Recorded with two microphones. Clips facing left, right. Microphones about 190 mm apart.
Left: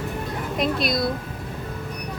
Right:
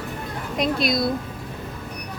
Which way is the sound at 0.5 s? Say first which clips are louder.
Right 2 dB; centre (ahead or behind).